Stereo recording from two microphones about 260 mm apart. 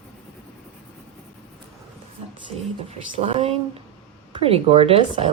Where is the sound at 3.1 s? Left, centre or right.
Right.